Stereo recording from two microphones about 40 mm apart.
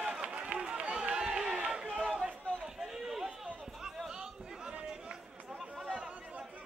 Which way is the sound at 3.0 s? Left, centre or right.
Centre.